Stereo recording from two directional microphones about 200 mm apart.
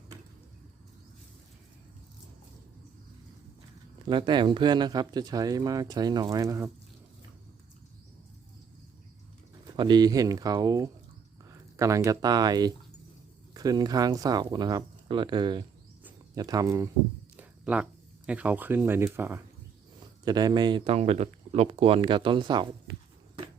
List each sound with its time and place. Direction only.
4.1 s speech: 25° right (ahead or behind)
9.7 s speech: 20° right (ahead or behind)
17.3 s a sound: 5° right (ahead or behind)
18.3 s speech: 5° right (ahead or behind); by 22.6 s 25° right (ahead or behind)